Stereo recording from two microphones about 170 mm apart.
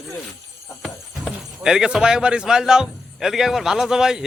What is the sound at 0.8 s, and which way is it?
Speech, centre (ahead or behind).